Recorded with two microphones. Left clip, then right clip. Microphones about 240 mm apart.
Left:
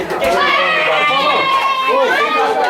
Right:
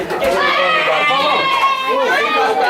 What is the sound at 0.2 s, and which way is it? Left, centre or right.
Run, centre.